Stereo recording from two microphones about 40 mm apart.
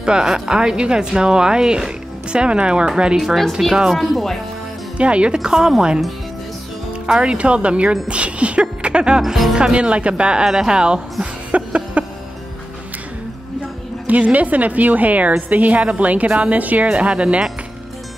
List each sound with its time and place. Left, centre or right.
0.0 s speech: centre
3.6 s speech: centre
3.9 s speech: centre
4.9 s speech: right
5.5 s speech: centre
7.1 s speech: right
9.2 s speech: centre
9.6 s speech: right
11.5 s a sound: right
14.0 s a woman's voice: right